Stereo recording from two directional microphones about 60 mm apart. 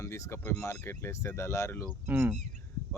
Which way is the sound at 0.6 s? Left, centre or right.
Left.